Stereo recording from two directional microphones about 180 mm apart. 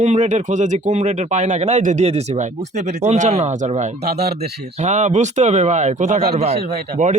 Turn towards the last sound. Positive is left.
turn(degrees=-40)  # may be behind; listen again after turning